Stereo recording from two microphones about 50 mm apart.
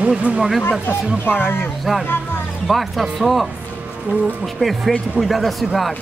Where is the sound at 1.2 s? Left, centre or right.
Left.